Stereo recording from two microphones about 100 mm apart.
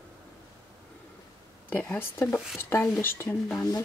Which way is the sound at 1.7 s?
20° left (ahead or behind).